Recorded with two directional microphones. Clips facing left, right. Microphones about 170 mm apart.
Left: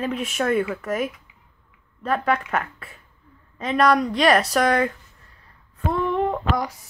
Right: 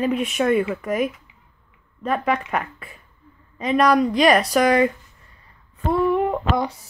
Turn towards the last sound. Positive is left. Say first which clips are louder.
# right 3 dB
turn(degrees=-10)  # may be behind; listen again after turning